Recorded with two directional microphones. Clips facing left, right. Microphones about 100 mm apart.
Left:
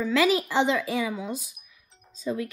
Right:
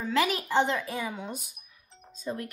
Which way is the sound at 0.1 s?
90° left.